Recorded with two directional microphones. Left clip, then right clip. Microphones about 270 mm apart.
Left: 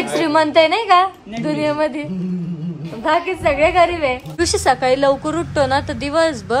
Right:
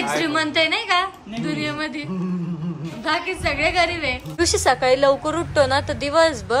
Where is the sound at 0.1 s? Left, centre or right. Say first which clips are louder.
Left 9 dB; centre.